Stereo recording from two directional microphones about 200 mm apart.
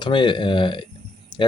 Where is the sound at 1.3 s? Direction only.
20° left (ahead or behind).